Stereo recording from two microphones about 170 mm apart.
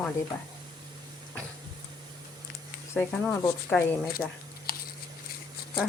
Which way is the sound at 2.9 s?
10° left (ahead or behind).